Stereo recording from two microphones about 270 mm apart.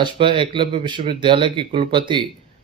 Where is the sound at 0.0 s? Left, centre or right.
Centre.